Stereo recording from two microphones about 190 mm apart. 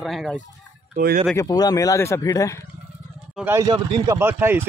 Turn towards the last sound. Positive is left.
turn(degrees=-10)  # may be behind; listen again after turning